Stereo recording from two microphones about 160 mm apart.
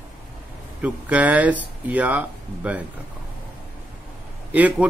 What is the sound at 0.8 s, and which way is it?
A man's voice, 10° right (ahead or behind).